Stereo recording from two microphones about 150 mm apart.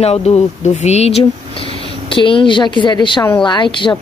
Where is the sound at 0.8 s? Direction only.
45° left (ahead or behind).